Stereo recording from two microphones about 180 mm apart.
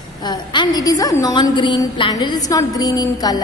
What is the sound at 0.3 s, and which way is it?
A woman's voice, 25° left (ahead or behind).